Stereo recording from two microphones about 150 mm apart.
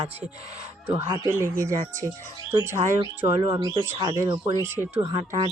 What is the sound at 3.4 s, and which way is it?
Speech, 30° right (ahead or behind).